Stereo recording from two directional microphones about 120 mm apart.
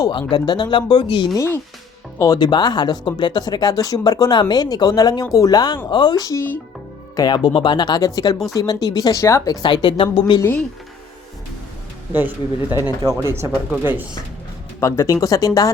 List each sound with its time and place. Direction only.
0.0 s speech: 40° left (ahead or behind)
1.4 s speech: 20° left (ahead or behind); by 10.4 s 45° left (ahead or behind)
12.1 s speech: 15° right (ahead or behind)
13.0 s speech: 30° right (ahead or behind)
13.7 s speech: 15° right (ahead or behind)
14.8 s speech: 25° left (ahead or behind)